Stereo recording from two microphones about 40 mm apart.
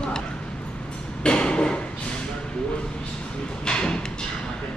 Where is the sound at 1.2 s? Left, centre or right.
Left.